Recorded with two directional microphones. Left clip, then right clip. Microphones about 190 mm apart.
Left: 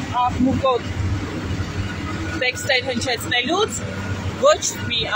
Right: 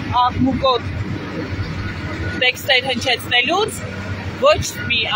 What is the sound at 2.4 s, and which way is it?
A woman's voice, 20° right (ahead or behind).